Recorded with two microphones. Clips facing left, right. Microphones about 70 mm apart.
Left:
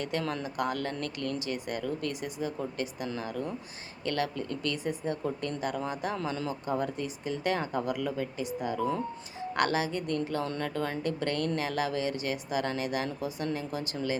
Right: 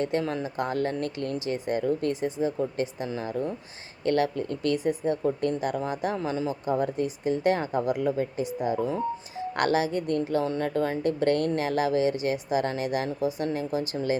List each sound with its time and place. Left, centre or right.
0.0 s a woman's voice: right